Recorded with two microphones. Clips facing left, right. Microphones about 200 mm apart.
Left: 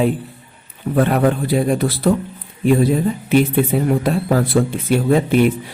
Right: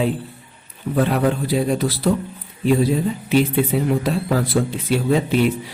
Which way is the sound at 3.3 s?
50° left (ahead or behind).